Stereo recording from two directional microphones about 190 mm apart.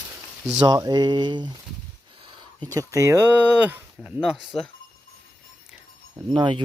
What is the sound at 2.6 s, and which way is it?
Speech, 15° right (ahead or behind).